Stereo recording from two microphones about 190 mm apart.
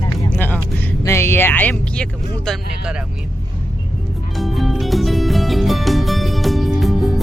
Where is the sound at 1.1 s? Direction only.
15° left (ahead or behind).